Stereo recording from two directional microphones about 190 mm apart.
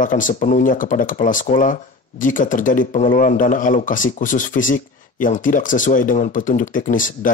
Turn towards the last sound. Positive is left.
turn(degrees=45)  # may be behind; listen again after turning